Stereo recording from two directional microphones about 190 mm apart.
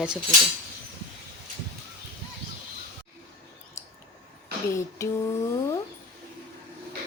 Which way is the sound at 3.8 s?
15° left (ahead or behind).